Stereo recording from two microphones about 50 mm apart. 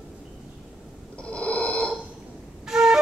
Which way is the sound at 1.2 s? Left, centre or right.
Left.